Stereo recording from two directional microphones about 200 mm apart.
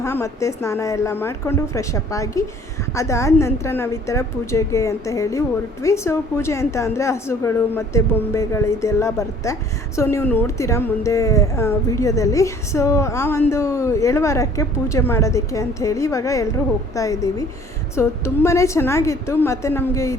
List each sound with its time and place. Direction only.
0.0 s a woman's voice: 15° left (ahead or behind)